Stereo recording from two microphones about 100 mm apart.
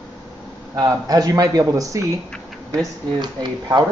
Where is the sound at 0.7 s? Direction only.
35° right (ahead or behind).